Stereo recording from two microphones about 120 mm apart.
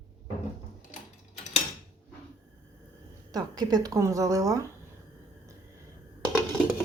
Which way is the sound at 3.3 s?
35° right (ahead or behind).